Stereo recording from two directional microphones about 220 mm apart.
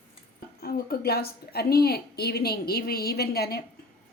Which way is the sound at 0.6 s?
45° left (ahead or behind).